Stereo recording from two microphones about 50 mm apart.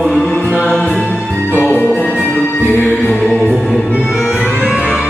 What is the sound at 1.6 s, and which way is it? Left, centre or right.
Music, left.